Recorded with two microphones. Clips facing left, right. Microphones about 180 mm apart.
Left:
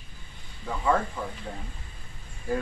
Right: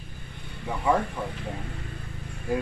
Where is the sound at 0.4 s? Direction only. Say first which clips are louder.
Right 9 dB; 65° right (ahead or behind).